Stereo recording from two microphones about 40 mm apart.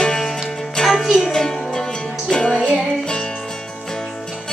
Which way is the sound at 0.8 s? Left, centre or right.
Centre.